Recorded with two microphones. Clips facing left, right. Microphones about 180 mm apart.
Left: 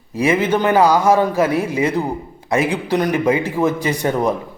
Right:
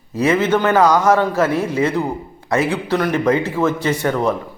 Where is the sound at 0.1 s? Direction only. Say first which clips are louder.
Right 1 dB; 10° left (ahead or behind).